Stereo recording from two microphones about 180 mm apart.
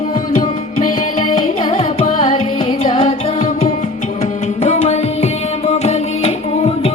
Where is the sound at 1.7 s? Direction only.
35° left (ahead or behind).